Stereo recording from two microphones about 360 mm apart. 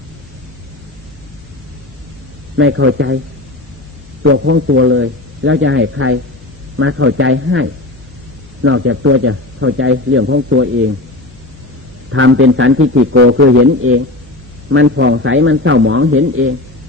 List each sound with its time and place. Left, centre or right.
2.6 s a man's voice: right
4.2 s a man's voice: right
12.1 s a man's voice: right